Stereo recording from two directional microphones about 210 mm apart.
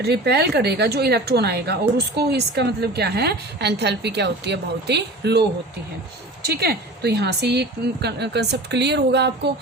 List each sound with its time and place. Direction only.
0.0 s a woman's voice: 50° right (ahead or behind)